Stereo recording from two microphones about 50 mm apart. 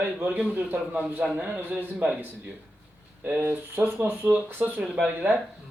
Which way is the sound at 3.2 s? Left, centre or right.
Right.